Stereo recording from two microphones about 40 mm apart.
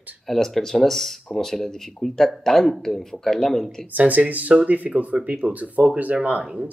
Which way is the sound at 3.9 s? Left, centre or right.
Right.